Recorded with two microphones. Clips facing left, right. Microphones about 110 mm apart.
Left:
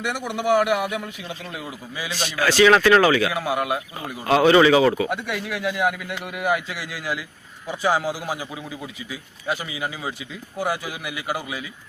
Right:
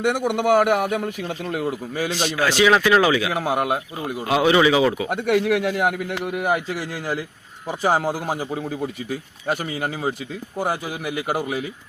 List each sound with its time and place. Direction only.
0.0 s a man's voice: 55° right (ahead or behind)
2.1 s a man's voice: 15° right (ahead or behind)
3.3 s a man's voice: 45° right (ahead or behind)
4.3 s a man's voice: 10° right (ahead or behind)
5.1 s a man's voice: 55° right (ahead or behind)